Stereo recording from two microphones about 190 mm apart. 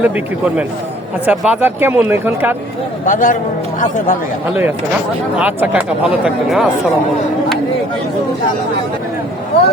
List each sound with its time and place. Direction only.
0.0 s speech: 5° right (ahead or behind)
3.1 s a man's voice: 45° left (ahead or behind)
5.4 s speech: 10° right (ahead or behind)